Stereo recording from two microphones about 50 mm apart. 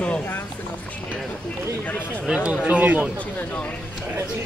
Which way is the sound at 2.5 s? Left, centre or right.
Right.